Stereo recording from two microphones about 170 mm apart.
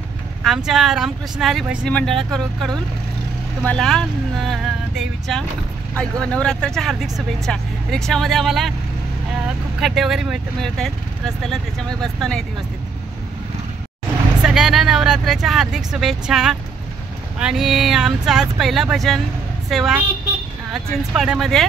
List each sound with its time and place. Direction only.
0.7 s speech: centre (ahead or behind)
9.8 s speech: centre (ahead or behind)
14.4 s speech: 5° right (ahead or behind)